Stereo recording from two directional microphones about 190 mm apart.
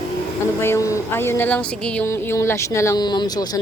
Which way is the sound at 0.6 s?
15° left (ahead or behind).